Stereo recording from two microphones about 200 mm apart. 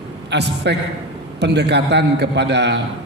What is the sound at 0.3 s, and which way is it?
A man's voice, 55° right (ahead or behind).